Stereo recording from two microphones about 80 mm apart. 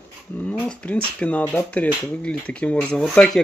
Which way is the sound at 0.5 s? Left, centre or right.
Centre.